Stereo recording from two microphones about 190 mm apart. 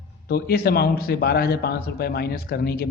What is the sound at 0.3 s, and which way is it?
A man's voice, 55° left (ahead or behind).